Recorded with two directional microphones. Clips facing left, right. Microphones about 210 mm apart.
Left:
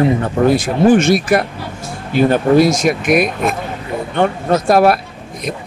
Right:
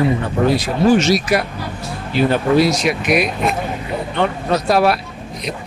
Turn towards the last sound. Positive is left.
turn(degrees=50)  # may be behind; listen again after turning